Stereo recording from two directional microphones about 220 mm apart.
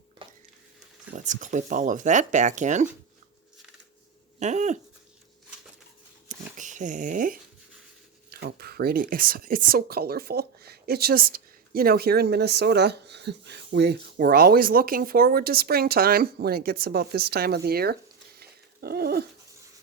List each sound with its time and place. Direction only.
0.2 s stir: 20° right (ahead or behind)
1.1 s speech: 35° right (ahead or behind)
4.4 s speech: 30° right (ahead or behind)
6.2 s dog: 35° right (ahead or behind)
8.3 s speech: 45° right (ahead or behind)